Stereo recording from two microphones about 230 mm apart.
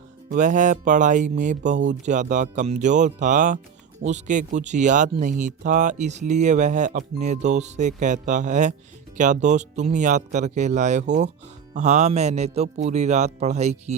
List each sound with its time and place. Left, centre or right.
0.3 s speech: right